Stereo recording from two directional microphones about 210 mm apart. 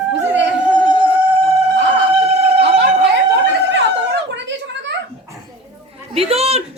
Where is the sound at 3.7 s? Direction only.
55° right (ahead or behind).